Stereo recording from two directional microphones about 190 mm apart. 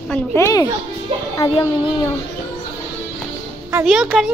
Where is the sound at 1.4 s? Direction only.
25° left (ahead or behind).